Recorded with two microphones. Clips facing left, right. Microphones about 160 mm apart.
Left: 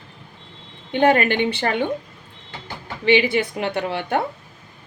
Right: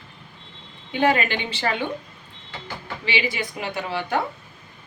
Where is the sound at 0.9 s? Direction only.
55° left (ahead or behind).